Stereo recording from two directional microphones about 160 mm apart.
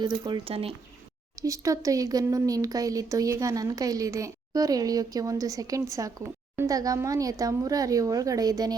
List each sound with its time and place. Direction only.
0.0 s speech: 30° right (ahead or behind)
1.4 s speech: 20° right (ahead or behind)